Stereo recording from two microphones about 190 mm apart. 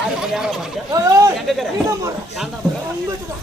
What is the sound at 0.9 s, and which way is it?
Speech, 15° right (ahead or behind).